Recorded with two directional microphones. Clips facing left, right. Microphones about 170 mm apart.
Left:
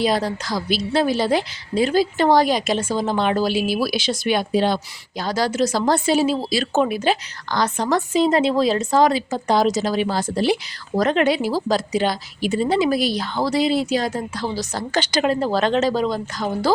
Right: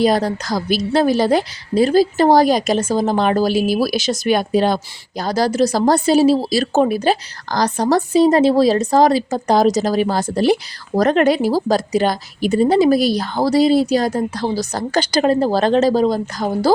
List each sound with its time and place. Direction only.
0.0 s a woman's voice: 45° right (ahead or behind)